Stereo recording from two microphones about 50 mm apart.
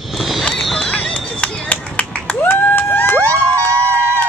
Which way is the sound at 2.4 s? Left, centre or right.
Left.